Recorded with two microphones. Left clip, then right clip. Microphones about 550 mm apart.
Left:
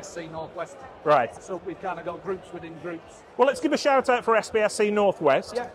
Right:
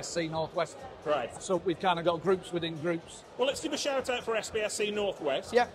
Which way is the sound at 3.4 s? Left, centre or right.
Left.